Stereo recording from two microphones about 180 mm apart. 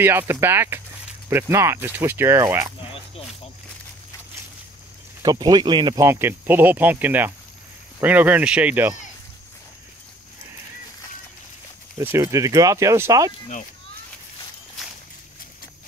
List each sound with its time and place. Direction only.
0.0 s speech: 15° right (ahead or behind)
5.2 s speech: 20° right (ahead or behind)
12.0 s speech: 15° right (ahead or behind)